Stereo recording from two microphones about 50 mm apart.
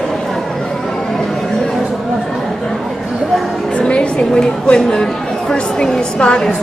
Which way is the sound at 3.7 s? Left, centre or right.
Left.